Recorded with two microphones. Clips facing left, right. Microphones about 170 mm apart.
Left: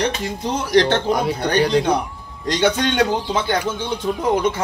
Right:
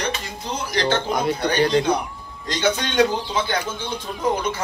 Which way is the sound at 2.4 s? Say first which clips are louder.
Left 4 dB; 65° left (ahead or behind).